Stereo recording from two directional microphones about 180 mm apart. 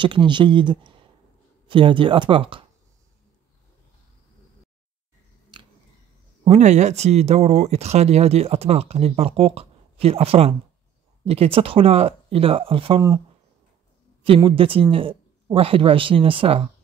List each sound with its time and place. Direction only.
0.0 s speech: 25° right (ahead or behind)
5.5 s a sound: 25° right (ahead or behind)
6.4 s speech: 40° right (ahead or behind)
14.2 s speech: 30° right (ahead or behind)